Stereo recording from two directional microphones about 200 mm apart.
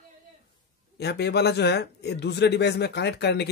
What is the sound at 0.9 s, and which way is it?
A man's voice, 55° left (ahead or behind).